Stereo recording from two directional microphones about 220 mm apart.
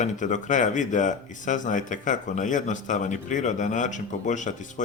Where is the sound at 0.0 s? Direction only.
35° left (ahead or behind).